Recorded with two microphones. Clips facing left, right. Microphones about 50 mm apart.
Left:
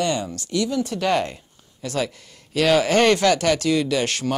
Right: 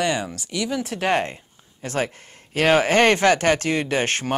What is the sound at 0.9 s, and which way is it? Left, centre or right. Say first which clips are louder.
Speech: even; right.